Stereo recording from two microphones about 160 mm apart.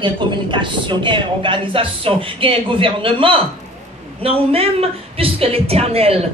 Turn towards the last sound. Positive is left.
turn(degrees=-40)  # may be behind; listen again after turning